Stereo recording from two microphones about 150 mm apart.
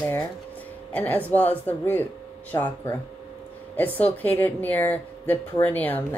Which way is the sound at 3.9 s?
10° left (ahead or behind).